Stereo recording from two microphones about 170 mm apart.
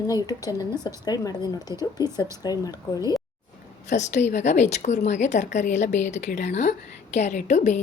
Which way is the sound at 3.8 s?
45° left (ahead or behind).